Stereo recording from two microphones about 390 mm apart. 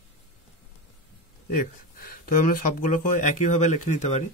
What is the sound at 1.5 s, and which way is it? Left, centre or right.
Speech, left.